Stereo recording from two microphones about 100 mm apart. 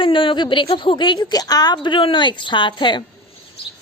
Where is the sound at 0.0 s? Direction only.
60° left (ahead or behind).